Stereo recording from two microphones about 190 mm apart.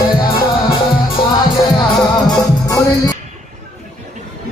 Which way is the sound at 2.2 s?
20° left (ahead or behind).